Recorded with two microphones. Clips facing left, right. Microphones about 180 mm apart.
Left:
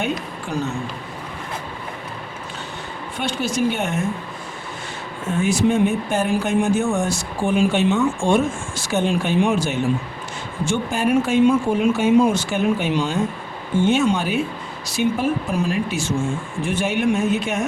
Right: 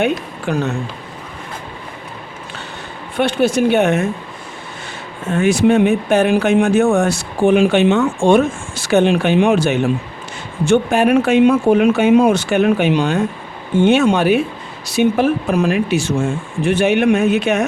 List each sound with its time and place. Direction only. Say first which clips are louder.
0.4 s speech: right 6 dB; 65° right (ahead or behind)
3.2 s speech: right 8 dB; 60° right (ahead or behind)
5.3 s speech: right 6 dB; 70° right (ahead or behind)